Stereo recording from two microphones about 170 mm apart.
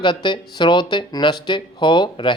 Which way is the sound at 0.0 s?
30° left (ahead or behind).